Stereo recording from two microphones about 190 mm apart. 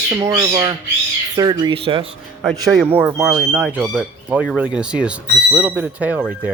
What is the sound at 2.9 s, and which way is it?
Speech, 5° right (ahead or behind).